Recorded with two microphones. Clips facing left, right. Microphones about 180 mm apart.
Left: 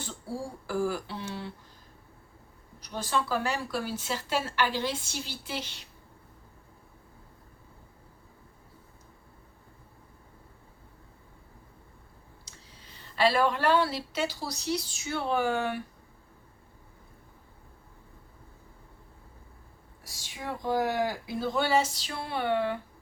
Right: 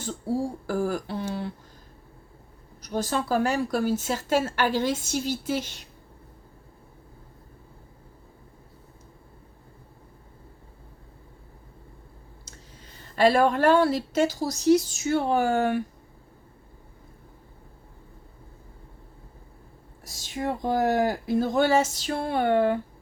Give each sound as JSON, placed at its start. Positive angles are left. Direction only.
{"t": 0.7, "sound": "a woman's voice", "side_deg": -45}
{"t": 2.8, "sound": "a woman's voice", "side_deg": -45}
{"t": 12.5, "sound": "speech", "side_deg": -45}
{"t": 20.1, "sound": "a woman's voice", "side_deg": -45}